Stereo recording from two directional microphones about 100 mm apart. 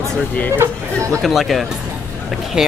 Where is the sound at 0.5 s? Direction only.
30° right (ahead or behind).